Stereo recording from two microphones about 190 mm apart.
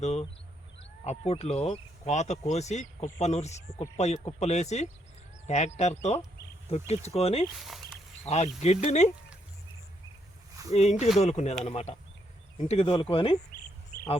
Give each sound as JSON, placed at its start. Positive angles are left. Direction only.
{"t": 0.0, "sound": "speech", "side_deg": 35}
{"t": 7.7, "sound": "a sound", "side_deg": 0}
{"t": 8.3, "sound": "speech", "side_deg": 35}
{"t": 10.8, "sound": "speech", "side_deg": 35}